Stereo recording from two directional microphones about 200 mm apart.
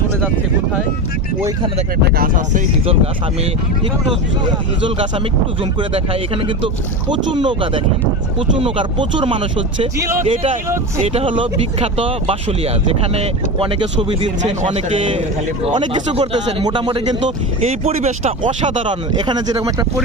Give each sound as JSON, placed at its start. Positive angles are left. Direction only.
{"t": 2.1, "sound": "speech", "side_deg": -45}
{"t": 4.8, "sound": "speech", "side_deg": -25}
{"t": 10.0, "sound": "speech", "side_deg": -15}
{"t": 10.2, "sound": "speech", "side_deg": -25}
{"t": 17.2, "sound": "speech", "side_deg": -35}